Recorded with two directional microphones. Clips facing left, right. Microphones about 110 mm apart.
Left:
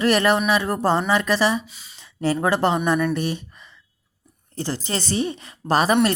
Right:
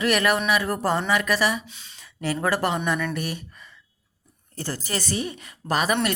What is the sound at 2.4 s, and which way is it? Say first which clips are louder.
A woman's voice: left 3 dB; 25° left (ahead or behind).